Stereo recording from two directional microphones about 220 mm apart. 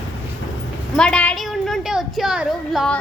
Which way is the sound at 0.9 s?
5° left (ahead or behind).